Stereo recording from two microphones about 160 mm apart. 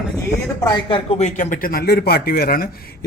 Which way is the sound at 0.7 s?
30° left (ahead or behind).